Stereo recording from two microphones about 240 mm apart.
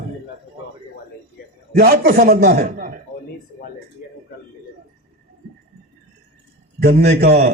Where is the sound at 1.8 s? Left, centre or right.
Right.